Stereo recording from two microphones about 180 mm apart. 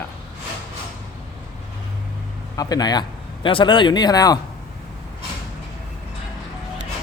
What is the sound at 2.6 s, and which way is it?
Speech, 20° left (ahead or behind).